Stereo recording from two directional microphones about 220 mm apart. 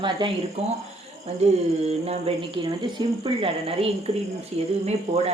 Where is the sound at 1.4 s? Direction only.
30° right (ahead or behind).